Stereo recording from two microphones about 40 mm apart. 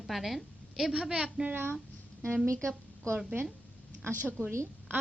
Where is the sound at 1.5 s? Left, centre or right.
Right.